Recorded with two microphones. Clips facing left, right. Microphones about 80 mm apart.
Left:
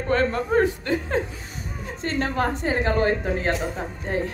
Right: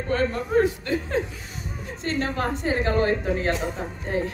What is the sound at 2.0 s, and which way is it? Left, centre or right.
A woman's voice, left.